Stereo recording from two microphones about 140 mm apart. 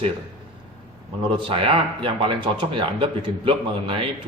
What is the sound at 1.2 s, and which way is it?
Speech, 40° right (ahead or behind).